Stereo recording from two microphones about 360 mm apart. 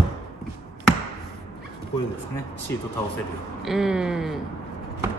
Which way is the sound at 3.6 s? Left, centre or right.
Centre.